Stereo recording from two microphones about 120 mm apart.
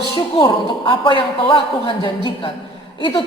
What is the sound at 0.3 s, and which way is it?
A man's voice, 45° left (ahead or behind).